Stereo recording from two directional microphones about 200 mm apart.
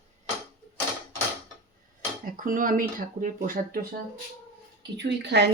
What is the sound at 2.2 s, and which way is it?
Speech, 45° right (ahead or behind).